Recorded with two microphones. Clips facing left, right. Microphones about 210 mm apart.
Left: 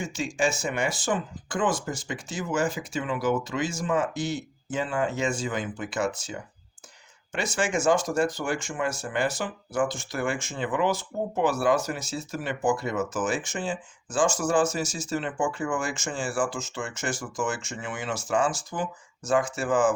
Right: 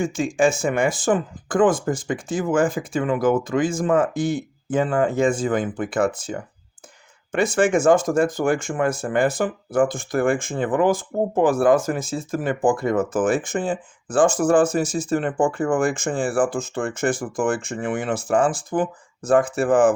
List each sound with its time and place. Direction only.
0.0 s speech: 50° right (ahead or behind)